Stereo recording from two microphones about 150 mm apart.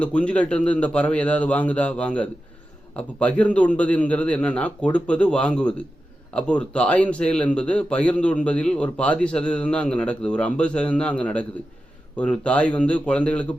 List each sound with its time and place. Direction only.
0.0 s speech: 10° left (ahead or behind)